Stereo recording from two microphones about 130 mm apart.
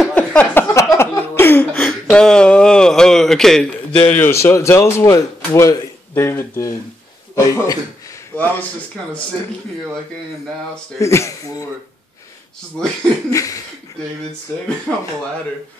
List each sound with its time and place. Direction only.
0.1 s a sound: 10° left (ahead or behind)
4.0 s speech: 20° left (ahead or behind)
11.0 s speech: 20° left (ahead or behind)
13.3 s speech: 25° left (ahead or behind)
14.9 s speech: 5° left (ahead or behind)